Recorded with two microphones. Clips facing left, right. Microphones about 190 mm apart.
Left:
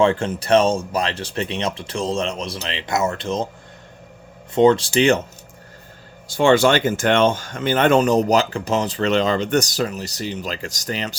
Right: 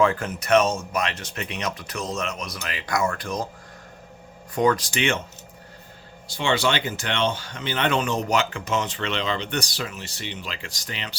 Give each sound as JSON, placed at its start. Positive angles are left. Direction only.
{"t": 0.0, "sound": "speech", "side_deg": 25}
{"t": 4.5, "sound": "speech", "side_deg": 25}
{"t": 6.2, "sound": "speech", "side_deg": 50}